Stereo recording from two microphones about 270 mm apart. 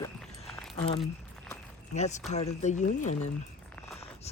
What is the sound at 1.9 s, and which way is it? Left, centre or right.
Speech, left.